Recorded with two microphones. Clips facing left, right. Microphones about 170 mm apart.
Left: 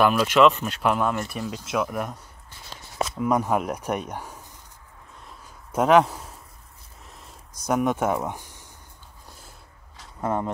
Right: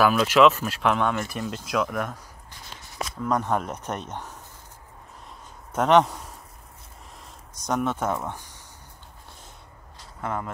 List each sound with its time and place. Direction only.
0.0 s speech: 5° left (ahead or behind)
0.3 s speech: 5° right (ahead or behind)
3.2 s speech: 10° left (ahead or behind)
5.7 s a man's voice: 5° left (ahead or behind)
7.6 s speech: 10° left (ahead or behind)
10.2 s speech: 30° left (ahead or behind)